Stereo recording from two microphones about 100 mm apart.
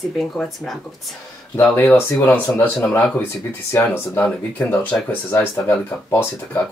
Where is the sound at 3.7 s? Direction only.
20° left (ahead or behind).